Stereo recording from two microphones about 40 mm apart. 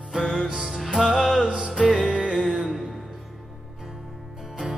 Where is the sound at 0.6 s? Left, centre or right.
Centre.